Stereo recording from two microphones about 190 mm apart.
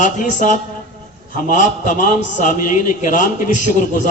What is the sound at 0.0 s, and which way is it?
A man's voice, 40° left (ahead or behind).